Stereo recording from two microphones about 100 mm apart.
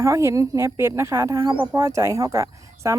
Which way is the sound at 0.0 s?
30° right (ahead or behind).